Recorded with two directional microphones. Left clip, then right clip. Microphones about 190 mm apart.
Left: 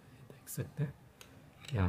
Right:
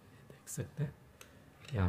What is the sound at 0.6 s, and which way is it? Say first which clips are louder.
Speech: left 1 dB; 5° left (ahead or behind).